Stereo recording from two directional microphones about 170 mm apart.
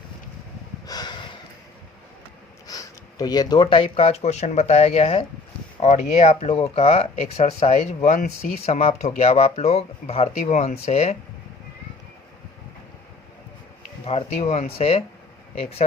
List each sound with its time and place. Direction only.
0.9 s snort: 25° left (ahead or behind)
2.6 s speech: 20° left (ahead or behind); by 11.2 s 40° left (ahead or behind)
14.0 s speech: 35° left (ahead or behind)